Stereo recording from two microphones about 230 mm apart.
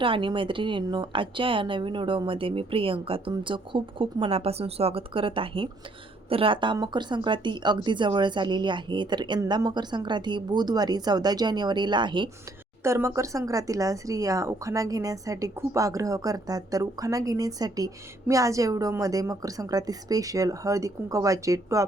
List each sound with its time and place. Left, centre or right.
0.0 s speech: right